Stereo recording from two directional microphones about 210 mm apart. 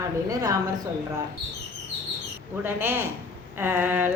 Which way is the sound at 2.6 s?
10° right (ahead or behind).